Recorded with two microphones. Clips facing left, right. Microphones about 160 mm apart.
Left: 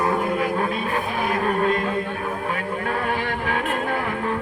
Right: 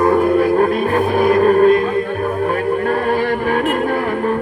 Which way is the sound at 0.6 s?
55° right (ahead or behind).